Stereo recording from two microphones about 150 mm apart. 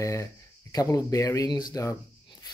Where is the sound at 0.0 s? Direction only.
20° left (ahead or behind).